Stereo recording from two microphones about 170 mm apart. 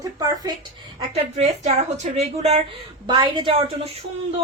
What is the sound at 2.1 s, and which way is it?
A woman's voice, 40° right (ahead or behind).